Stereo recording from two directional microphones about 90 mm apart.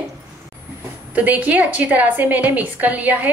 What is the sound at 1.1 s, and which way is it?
A woman's voice, 20° right (ahead or behind).